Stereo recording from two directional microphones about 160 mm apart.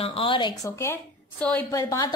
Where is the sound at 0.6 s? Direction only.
15° left (ahead or behind).